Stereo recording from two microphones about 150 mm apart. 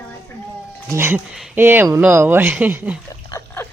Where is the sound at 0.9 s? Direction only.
15° right (ahead or behind).